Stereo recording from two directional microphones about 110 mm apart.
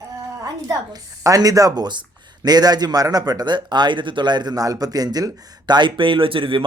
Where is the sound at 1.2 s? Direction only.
30° right (ahead or behind).